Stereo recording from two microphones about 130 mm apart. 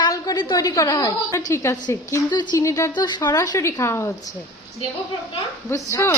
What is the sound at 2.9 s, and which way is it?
A woman's voice, 35° left (ahead or behind).